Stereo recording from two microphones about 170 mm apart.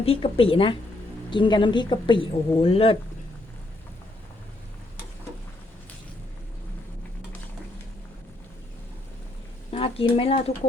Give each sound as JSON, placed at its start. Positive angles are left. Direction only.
{"t": 0.0, "sound": "a woman's voice", "side_deg": 35}
{"t": 9.7, "sound": "speech", "side_deg": 30}